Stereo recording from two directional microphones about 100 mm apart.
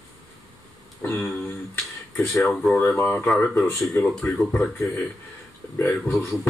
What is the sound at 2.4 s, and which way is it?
Speech, centre (ahead or behind).